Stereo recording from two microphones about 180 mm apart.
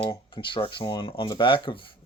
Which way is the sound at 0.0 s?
30° left (ahead or behind).